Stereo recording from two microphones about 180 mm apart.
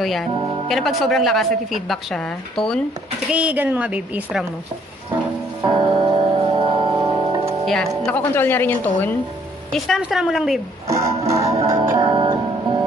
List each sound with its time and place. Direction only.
0.0 s a woman's voice: centre (ahead or behind)
3.3 s a woman's voice: 5° right (ahead or behind)
5.6 s music: 25° right (ahead or behind)
7.6 s a woman's voice: centre (ahead or behind)
11.2 s a woman's voice: 15° right (ahead or behind)
12.0 s music: 25° right (ahead or behind)